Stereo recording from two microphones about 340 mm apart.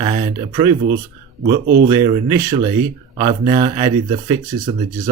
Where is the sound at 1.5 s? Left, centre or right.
Right.